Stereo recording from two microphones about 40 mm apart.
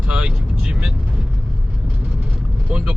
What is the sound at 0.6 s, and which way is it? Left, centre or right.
Speech, right.